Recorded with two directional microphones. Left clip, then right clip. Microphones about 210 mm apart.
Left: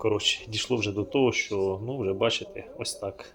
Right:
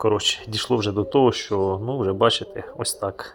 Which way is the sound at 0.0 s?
25° right (ahead or behind).